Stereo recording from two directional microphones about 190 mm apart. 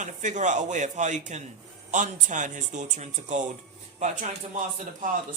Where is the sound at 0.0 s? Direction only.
40° right (ahead or behind).